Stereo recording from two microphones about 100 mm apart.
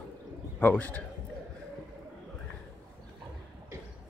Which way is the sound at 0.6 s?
20° left (ahead or behind).